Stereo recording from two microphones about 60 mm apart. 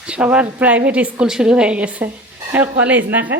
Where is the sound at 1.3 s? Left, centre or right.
Centre; by 3.3 s right.